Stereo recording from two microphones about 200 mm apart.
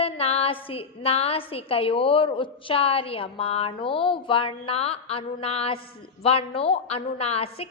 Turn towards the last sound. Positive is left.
turn(degrees=30)  # may be behind; listen again after turning